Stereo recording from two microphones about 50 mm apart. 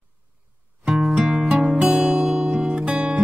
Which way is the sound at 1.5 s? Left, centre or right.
Centre.